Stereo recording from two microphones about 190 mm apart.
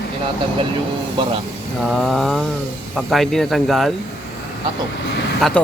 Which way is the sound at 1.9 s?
Centre (ahead or behind).